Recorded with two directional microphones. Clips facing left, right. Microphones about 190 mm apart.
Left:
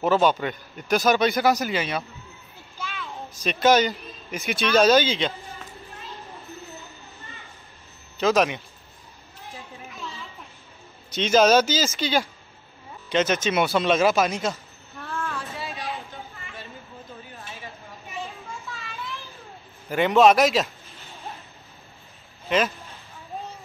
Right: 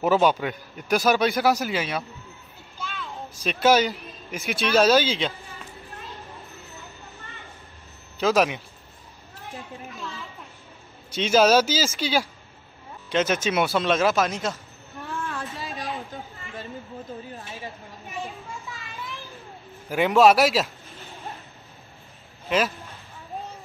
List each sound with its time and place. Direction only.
0.0 s speech: 10° right (ahead or behind)
8.2 s speech: 5° right (ahead or behind)
11.1 s speech: 5° right (ahead or behind)
15.0 s a sound: 15° right (ahead or behind)
15.6 s a sound: 45° right (ahead or behind)
19.9 s speech: 5° right (ahead or behind)